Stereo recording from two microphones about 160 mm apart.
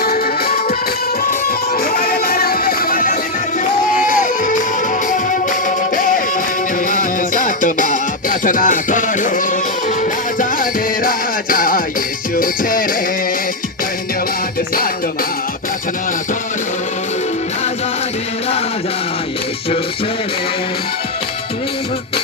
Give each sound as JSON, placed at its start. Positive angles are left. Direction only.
{"t": 0.0, "sound": "music", "side_deg": 70}
{"t": 10.6, "sound": "music", "side_deg": 60}